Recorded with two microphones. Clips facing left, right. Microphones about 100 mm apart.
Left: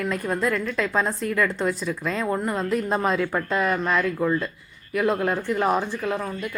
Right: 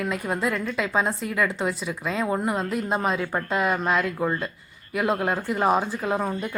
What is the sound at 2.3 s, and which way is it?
Speech, 15° right (ahead or behind).